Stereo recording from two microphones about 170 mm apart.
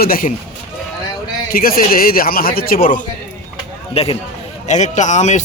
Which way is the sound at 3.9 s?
35° left (ahead or behind).